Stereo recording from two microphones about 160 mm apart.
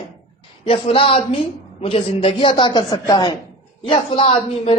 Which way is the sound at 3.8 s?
35° left (ahead or behind).